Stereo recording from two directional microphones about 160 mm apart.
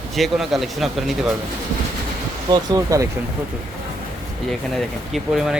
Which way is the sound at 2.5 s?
20° right (ahead or behind).